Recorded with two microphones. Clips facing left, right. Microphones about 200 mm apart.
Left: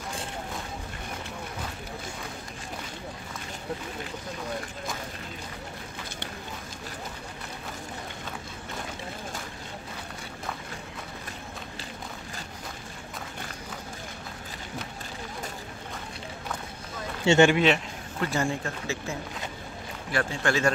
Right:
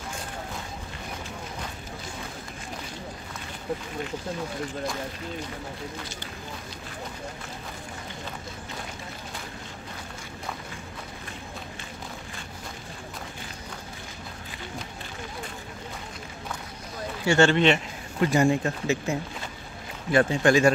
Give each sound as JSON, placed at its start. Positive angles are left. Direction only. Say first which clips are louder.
{"t": 17.2, "sound": "a sound", "louder": "left 1 dB", "side_deg": 25}
{"t": 17.5, "sound": "a man's voice", "louder": "right 1 dB", "side_deg": 5}
{"t": 18.2, "sound": "a man's voice", "louder": "right 7 dB", "side_deg": -15}